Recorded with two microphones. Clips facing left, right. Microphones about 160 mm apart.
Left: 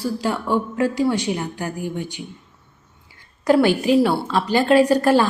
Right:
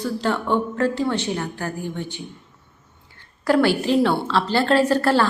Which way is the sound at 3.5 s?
15° left (ahead or behind).